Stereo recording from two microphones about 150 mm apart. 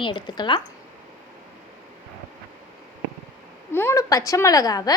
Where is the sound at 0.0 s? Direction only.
30° left (ahead or behind).